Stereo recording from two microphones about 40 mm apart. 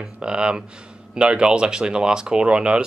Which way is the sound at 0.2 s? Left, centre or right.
Right.